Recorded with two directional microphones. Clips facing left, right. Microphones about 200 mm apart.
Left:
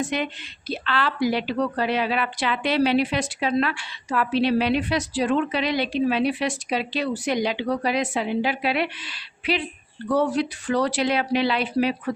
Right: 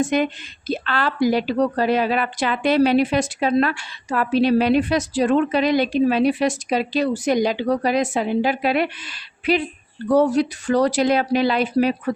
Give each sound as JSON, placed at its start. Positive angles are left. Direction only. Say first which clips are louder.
{"t": 0.0, "sound": "a woman's voice", "louder": "right 6 dB", "side_deg": -45}